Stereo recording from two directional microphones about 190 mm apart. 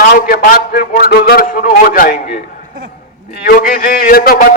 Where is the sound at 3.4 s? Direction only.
50° left (ahead or behind).